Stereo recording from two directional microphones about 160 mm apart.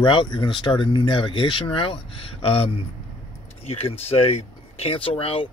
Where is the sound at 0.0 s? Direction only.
30° left (ahead or behind).